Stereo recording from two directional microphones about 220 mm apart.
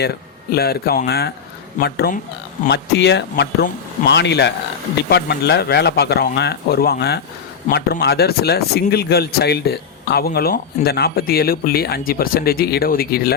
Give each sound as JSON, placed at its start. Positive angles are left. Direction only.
{"t": 0.5, "sound": "speech", "side_deg": 45}